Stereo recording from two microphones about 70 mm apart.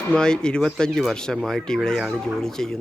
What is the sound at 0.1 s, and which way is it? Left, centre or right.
Speech, centre.